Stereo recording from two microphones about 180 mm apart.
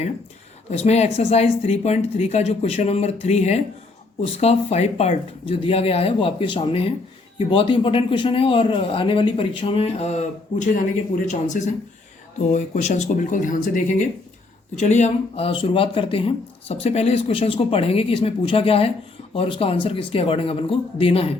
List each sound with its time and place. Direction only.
0.7 s speech: 35° left (ahead or behind)